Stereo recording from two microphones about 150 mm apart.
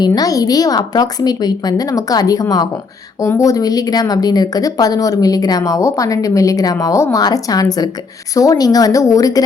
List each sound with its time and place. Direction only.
0.0 s speech: 25° left (ahead or behind)